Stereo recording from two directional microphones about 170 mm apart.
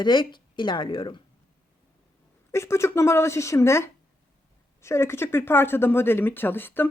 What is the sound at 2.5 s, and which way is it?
Speech, 15° left (ahead or behind).